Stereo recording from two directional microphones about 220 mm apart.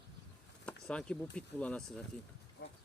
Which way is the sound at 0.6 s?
5° left (ahead or behind).